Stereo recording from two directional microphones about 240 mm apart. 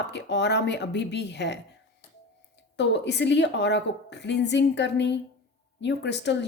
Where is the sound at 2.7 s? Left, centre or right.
Left.